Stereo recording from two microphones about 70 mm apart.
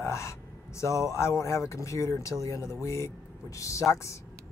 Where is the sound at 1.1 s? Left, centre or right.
Left.